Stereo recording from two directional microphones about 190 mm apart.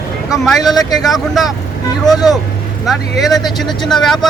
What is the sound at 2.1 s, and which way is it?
Speech, 20° left (ahead or behind).